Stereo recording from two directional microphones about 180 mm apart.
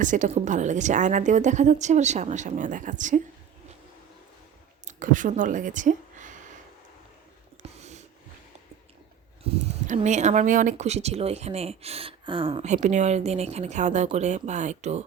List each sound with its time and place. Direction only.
0.0 s a woman's voice: 45° right (ahead or behind)
4.9 s speech: 45° right (ahead or behind)
7.6 s a sound: 40° right (ahead or behind)
9.4 s speech: 40° right (ahead or behind)
12.7 s speech: 40° right (ahead or behind)